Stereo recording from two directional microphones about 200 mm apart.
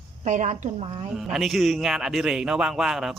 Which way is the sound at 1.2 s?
Centre (ahead or behind).